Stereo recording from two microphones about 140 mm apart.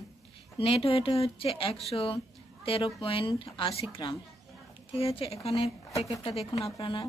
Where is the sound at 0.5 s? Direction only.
45° left (ahead or behind).